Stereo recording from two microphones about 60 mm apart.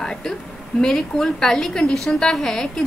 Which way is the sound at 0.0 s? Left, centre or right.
Centre.